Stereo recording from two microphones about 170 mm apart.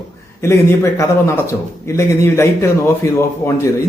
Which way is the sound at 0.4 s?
15° left (ahead or behind).